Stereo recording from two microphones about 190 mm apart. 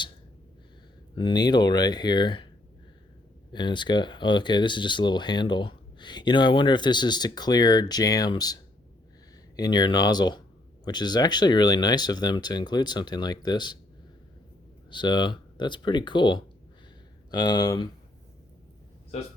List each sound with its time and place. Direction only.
1.1 s speech: 25° left (ahead or behind)
3.5 s speech: 25° left (ahead or behind)
9.6 s speech: 20° left (ahead or behind)
14.8 s speech: 25° left (ahead or behind)